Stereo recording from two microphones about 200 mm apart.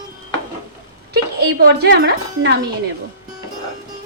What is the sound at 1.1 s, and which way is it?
Speech, 50° right (ahead or behind).